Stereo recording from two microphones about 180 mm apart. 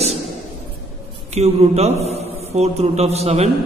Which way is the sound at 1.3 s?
35° right (ahead or behind).